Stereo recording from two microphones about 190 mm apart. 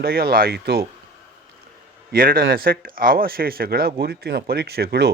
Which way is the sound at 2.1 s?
50° right (ahead or behind).